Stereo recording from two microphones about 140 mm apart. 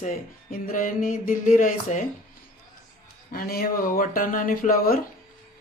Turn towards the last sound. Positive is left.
turn(degrees=90)